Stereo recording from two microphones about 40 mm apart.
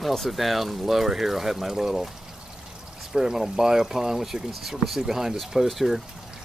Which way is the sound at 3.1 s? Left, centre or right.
Centre.